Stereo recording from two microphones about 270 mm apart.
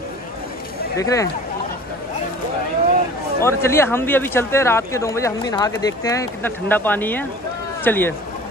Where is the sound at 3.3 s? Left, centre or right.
Centre.